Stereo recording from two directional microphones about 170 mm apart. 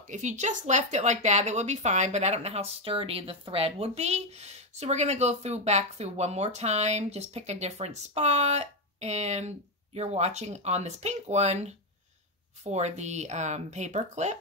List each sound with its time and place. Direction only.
0.0 s speech: 45° right (ahead or behind)
12.7 s speech: 40° right (ahead or behind)